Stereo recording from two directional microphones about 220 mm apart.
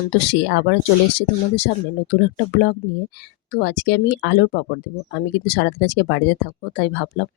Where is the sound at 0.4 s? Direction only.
50° left (ahead or behind).